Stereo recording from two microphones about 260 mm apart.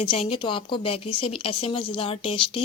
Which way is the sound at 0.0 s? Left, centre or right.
Centre.